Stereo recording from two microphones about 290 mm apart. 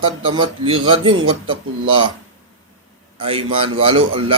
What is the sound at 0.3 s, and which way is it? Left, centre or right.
A man's voice, centre.